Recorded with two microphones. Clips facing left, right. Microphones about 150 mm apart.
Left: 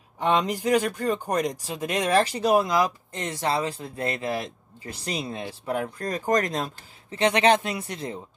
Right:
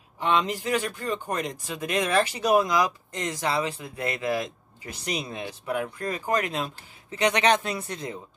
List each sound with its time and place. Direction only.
0.2 s speech: 40° left (ahead or behind); by 8.2 s 25° left (ahead or behind)